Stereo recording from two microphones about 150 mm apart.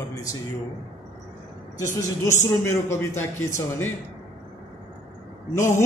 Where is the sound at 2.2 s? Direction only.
20° left (ahead or behind).